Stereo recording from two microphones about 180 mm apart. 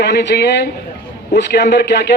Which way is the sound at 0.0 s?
70° left (ahead or behind).